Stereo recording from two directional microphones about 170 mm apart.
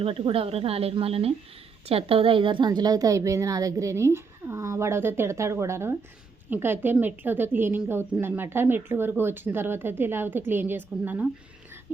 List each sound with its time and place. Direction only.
0.0 s a woman's voice: 35° right (ahead or behind); by 11.3 s 10° right (ahead or behind)